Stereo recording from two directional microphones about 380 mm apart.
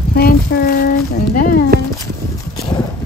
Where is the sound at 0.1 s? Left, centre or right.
Left.